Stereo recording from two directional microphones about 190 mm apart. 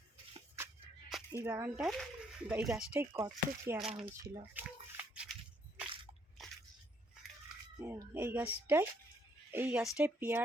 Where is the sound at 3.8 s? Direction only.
Centre (ahead or behind).